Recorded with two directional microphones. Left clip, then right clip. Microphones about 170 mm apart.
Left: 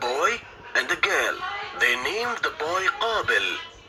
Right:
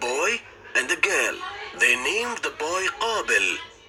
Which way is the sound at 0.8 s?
30° right (ahead or behind).